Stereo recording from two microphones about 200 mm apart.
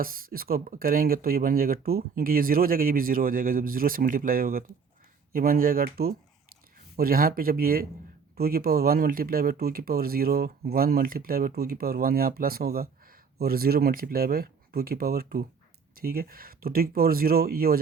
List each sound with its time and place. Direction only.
0.0 s speech: 45° right (ahead or behind)